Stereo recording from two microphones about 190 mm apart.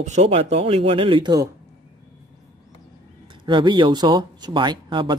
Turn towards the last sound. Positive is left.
turn(degrees=-25)  # may be behind; listen again after turning